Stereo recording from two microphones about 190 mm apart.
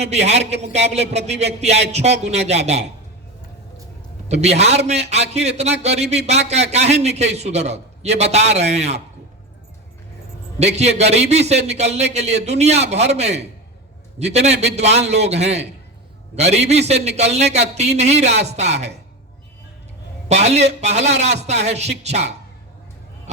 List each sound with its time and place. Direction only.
0.0 s a man's voice: 35° right (ahead or behind)
4.3 s a man's voice: 35° right (ahead or behind)
10.6 s a man's voice: 35° right (ahead or behind)
20.2 s a man's voice: 35° right (ahead or behind)